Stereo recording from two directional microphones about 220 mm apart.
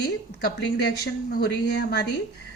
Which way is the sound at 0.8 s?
45° left (ahead or behind).